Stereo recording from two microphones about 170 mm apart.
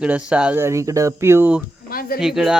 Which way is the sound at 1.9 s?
60° left (ahead or behind).